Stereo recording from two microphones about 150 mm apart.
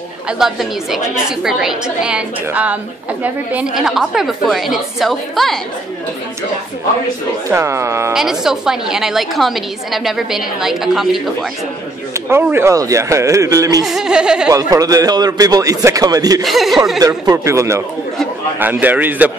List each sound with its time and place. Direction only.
0.3 s a woman's voice: 5° right (ahead or behind)
7.4 s a man's voice: 20° right (ahead or behind)
8.1 s a woman's voice: 5° right (ahead or behind)
12.1 s a man's voice: 15° right (ahead or behind)
13.8 s a woman's voice: 5° right (ahead or behind)
14.5 s a man's voice: 25° right (ahead or behind)
16.4 s a woman's voice: centre (ahead or behind)
17.0 s a man's voice: 20° right (ahead or behind)